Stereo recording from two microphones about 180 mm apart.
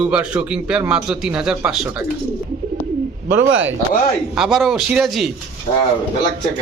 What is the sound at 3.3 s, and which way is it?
Speech, 90° right.